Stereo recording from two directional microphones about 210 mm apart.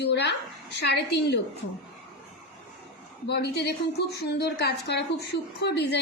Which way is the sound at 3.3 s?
55° left (ahead or behind).